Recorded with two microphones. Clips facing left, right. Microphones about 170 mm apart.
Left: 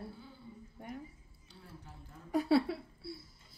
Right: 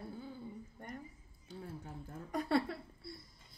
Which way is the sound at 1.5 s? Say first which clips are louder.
Right 7 dB; 50° right (ahead or behind).